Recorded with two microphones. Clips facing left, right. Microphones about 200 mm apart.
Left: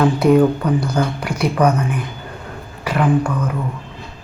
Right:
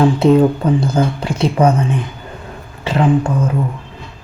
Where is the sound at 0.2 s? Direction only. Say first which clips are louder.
Right 2 dB; 25° right (ahead or behind).